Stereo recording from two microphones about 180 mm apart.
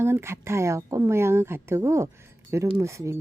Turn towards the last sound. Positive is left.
turn(degrees=-15)  # may be behind; listen again after turning